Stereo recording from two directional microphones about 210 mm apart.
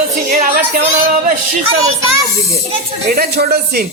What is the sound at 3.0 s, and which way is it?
Speech, 50° right (ahead or behind).